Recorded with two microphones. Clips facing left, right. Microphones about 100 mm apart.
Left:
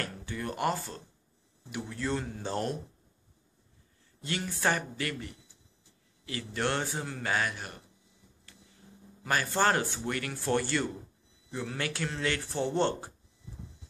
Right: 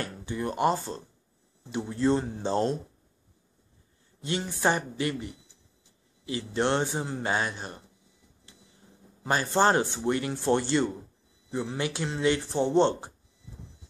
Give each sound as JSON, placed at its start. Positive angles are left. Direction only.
{"t": 0.0, "sound": "speech", "side_deg": -20}
{"t": 4.2, "sound": "speech", "side_deg": -20}
{"t": 9.2, "sound": "speech", "side_deg": -25}